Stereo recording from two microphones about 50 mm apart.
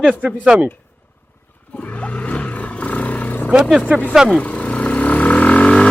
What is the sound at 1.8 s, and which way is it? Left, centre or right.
Roar, left.